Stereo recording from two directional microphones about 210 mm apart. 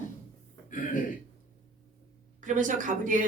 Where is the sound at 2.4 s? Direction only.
35° right (ahead or behind).